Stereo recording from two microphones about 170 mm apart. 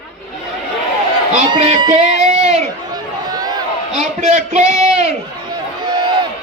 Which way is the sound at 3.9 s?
40° right (ahead or behind).